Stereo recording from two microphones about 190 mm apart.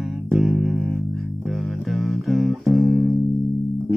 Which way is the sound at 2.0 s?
Centre (ahead or behind).